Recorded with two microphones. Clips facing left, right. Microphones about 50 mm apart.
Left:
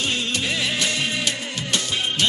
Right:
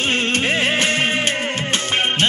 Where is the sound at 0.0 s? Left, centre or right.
Right.